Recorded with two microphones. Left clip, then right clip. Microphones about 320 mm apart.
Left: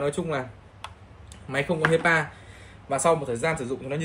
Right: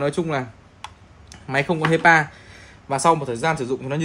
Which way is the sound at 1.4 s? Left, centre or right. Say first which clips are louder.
Right 3 dB; right.